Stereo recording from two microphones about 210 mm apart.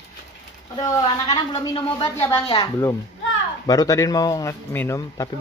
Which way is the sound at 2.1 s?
10° left (ahead or behind).